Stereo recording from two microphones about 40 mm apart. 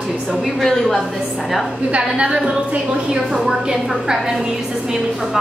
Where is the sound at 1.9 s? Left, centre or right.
Right.